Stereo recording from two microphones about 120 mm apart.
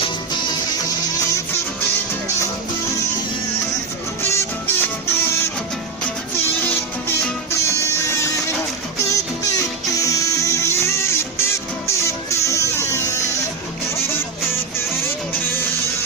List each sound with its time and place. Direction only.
4.2 s music: 20° left (ahead or behind)
7.5 s music: 25° left (ahead or behind)
9.0 s music: 25° left (ahead or behind)